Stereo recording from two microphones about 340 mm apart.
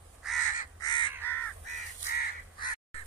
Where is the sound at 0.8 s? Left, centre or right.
Centre.